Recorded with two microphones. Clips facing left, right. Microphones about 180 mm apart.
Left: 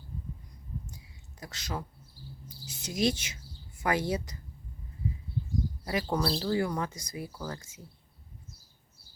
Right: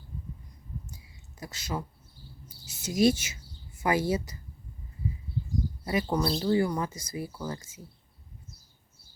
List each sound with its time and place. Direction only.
1.4 s a woman's voice: 5° right (ahead or behind)
5.8 s speech: centre (ahead or behind)